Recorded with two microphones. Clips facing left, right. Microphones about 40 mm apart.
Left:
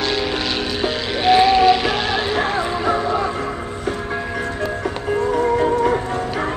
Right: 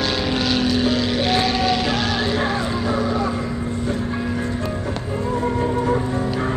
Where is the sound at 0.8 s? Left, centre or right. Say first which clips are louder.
Left 2 dB; centre.